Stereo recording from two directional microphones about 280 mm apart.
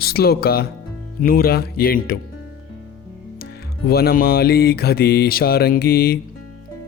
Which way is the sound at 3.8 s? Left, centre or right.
Left.